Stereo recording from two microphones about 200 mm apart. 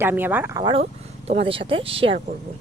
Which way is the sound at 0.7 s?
30° right (ahead or behind).